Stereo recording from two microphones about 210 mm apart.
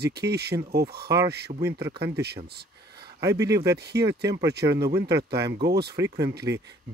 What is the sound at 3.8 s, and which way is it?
Speech, 50° right (ahead or behind).